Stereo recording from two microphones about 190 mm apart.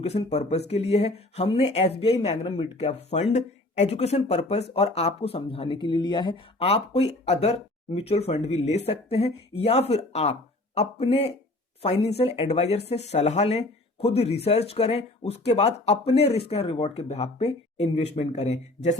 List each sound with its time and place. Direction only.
0.0 s speech: 35° left (ahead or behind)